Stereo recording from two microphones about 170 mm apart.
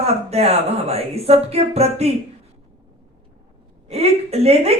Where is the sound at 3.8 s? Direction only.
40° right (ahead or behind).